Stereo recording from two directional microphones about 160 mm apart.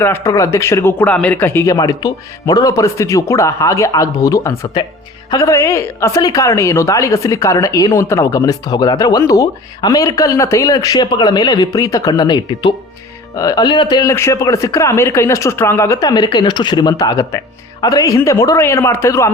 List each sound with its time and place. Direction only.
0.0 s a woman's voice: 15° left (ahead or behind)